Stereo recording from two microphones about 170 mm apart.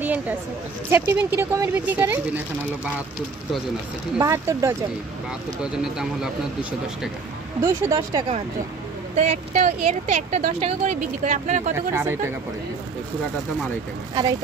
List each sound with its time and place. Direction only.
0.0 s a sound: 10° right (ahead or behind)
0.8 s speech: 15° right (ahead or behind)
4.2 s speech: 20° right (ahead or behind)
5.6 s speech: 5° right (ahead or behind)
7.6 s speech: 20° right (ahead or behind)
9.1 s speech: 40° right (ahead or behind)
11.7 s speech: 15° right (ahead or behind)